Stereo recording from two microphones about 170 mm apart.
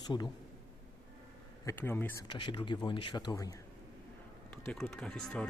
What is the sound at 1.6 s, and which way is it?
Speech, 10° left (ahead or behind).